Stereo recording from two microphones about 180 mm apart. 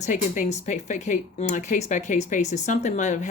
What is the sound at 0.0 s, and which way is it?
Speech, 45° left (ahead or behind).